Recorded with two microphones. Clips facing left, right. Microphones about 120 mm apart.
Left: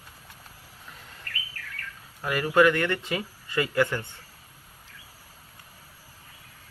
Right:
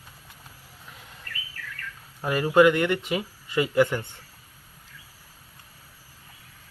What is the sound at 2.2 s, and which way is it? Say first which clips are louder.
Speech: right 3 dB; 25° right (ahead or behind).